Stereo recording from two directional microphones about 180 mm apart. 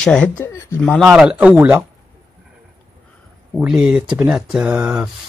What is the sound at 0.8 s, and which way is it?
Speech, 5° left (ahead or behind).